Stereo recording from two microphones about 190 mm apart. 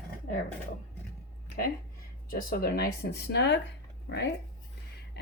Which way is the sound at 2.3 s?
50° left (ahead or behind).